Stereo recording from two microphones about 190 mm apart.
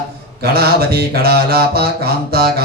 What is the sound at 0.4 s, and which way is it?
Mantra, 55° right (ahead or behind).